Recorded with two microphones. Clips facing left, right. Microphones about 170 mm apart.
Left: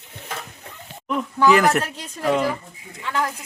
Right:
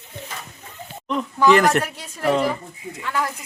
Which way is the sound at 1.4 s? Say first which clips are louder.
Right 1 dB; 5° left (ahead or behind).